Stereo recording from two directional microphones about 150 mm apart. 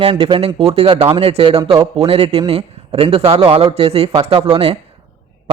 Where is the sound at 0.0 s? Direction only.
35° right (ahead or behind).